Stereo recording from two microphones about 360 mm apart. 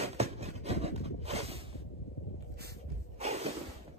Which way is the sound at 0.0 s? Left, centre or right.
Centre.